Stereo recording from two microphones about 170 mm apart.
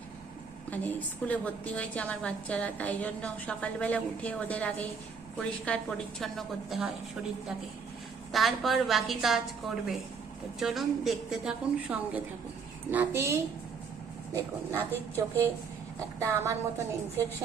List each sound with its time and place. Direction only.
0.7 s a woman's voice: 10° left (ahead or behind)
8.3 s a woman's voice: centre (ahead or behind); by 16.6 s 15° right (ahead or behind)